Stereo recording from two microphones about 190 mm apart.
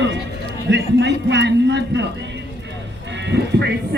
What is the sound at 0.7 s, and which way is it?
A man's voice, 65° right (ahead or behind).